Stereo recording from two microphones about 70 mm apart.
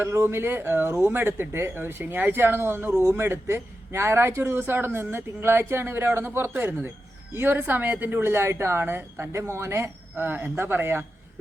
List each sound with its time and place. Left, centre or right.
0.0 s speech: right